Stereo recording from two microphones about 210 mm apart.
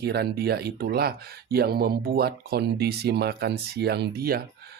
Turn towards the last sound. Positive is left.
turn(degrees=-45)  # may be behind; listen again after turning